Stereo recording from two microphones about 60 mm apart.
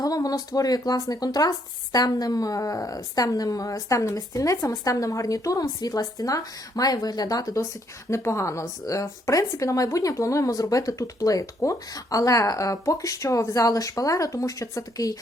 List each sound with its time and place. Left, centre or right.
0.0 s speech: left
8.1 s speech: left